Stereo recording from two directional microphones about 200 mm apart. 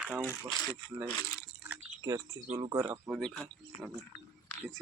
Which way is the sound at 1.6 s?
15° right (ahead or behind).